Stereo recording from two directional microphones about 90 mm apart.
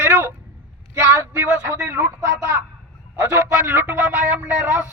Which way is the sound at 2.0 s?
15° right (ahead or behind).